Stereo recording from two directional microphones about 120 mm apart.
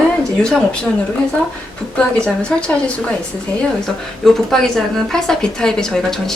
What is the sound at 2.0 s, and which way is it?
Speech, 5° left (ahead or behind).